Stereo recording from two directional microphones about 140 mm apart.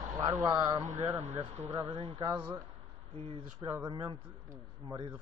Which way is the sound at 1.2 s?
50° right (ahead or behind).